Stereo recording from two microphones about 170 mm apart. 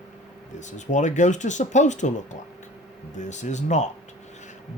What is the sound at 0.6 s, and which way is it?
Speech, 45° left (ahead or behind).